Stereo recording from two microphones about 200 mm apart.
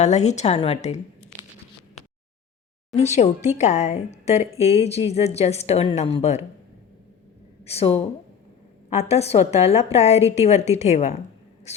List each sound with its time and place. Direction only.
0.0 s a woman's voice: 35° left (ahead or behind)
2.9 s a woman's voice: 35° left (ahead or behind)
7.6 s a woman's voice: 30° left (ahead or behind)